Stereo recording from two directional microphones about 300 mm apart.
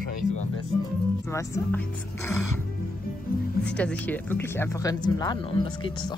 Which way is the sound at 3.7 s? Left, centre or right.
Centre.